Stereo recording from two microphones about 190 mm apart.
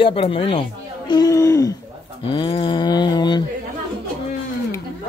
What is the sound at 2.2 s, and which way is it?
Speech, 25° left (ahead or behind).